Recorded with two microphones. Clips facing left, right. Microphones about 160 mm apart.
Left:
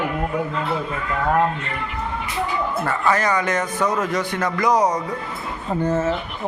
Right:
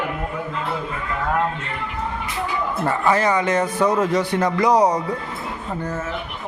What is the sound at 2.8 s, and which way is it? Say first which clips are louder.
Speech: right 3 dB; 25° right (ahead or behind).